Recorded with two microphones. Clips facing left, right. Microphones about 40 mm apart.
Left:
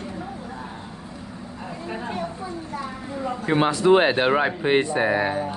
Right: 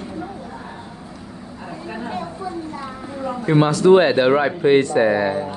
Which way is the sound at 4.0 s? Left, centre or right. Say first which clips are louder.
Right 4 dB; centre.